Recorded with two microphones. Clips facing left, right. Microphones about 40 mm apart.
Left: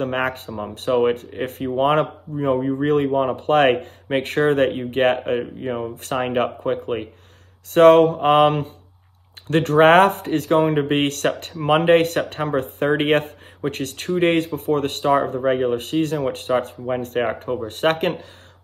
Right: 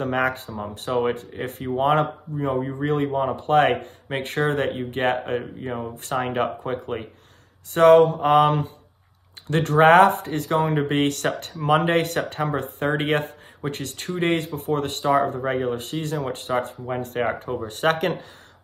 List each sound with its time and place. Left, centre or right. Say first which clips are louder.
0.0 s speech: even; left
1.8 s speech: left 2 dB; left
7.7 s speech: left 2 dB; left
17.2 s speech: even; left
17.6 s speech: left 1 dB; left